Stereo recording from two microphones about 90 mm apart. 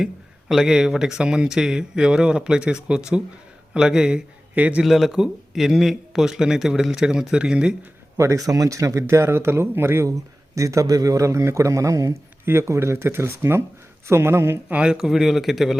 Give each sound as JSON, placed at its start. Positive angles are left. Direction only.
{"t": 0.0, "sound": "speech", "side_deg": -5}
{"t": 4.8, "sound": "speech", "side_deg": 0}
{"t": 8.1, "sound": "speech", "side_deg": -30}
{"t": 14.7, "sound": "a man's voice", "side_deg": -10}